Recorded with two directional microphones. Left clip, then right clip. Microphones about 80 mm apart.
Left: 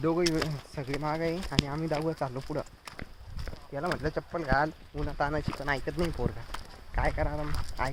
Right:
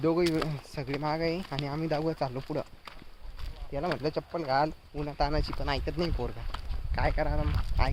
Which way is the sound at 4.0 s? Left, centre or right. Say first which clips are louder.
Right 1 dB; right.